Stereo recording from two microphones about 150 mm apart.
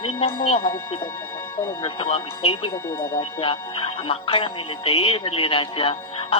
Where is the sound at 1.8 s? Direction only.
40° left (ahead or behind).